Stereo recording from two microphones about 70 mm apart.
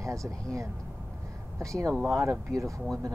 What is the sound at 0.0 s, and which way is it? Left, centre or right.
Speech, right.